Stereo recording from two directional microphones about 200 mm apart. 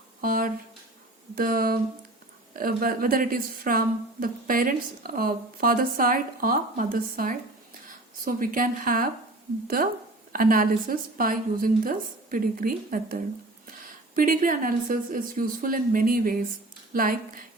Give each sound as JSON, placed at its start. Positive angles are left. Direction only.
{"t": 0.2, "sound": "a woman's voice", "side_deg": -45}